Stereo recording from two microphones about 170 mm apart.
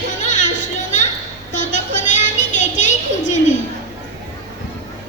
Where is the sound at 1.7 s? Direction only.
45° left (ahead or behind).